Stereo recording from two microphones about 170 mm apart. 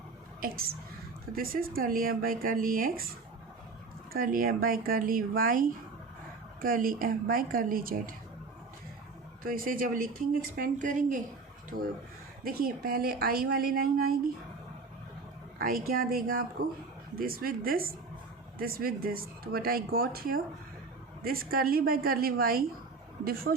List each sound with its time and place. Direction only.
0.4 s speech: 60° right (ahead or behind)
4.1 s speech: 55° right (ahead or behind)
9.4 s speech: 55° right (ahead or behind)
12.5 s speech: 60° right (ahead or behind)
15.5 s speech: 60° right (ahead or behind)